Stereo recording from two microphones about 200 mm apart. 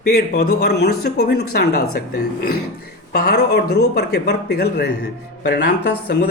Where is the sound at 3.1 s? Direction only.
55° left (ahead or behind).